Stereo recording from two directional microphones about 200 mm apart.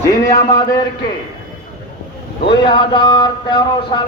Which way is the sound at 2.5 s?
25° left (ahead or behind).